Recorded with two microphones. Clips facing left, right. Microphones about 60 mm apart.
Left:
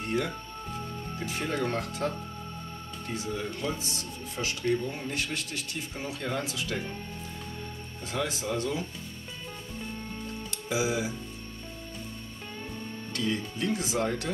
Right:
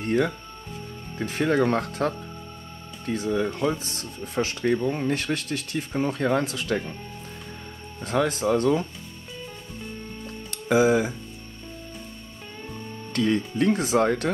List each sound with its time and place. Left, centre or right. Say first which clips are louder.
1.2 s speech: right 9 dB; right
3.3 s speech: right 10 dB; right
3.8 s speech: right 2 dB; right
8.0 s speech: right 9 dB; right
10.5 s speech: right 10 dB; right
13.1 s speech: right 8 dB; right